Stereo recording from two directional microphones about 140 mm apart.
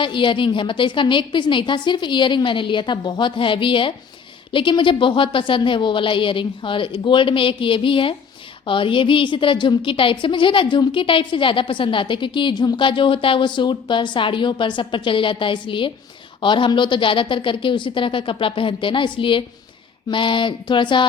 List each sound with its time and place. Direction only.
0.0 s a woman's voice: 35° left (ahead or behind)